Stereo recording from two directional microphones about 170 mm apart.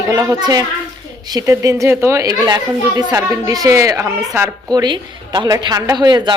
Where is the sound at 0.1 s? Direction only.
20° right (ahead or behind).